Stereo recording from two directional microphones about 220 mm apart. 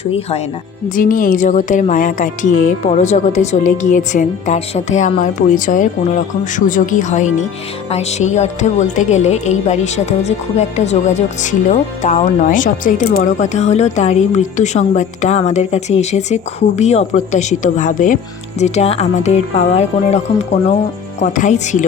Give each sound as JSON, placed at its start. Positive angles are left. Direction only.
{"t": 0.0, "sound": "speech", "side_deg": 25}
{"t": 0.9, "sound": "speech", "side_deg": 40}